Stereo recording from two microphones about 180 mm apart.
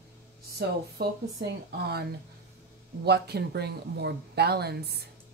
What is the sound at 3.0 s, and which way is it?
A woman's voice, 65° right (ahead or behind).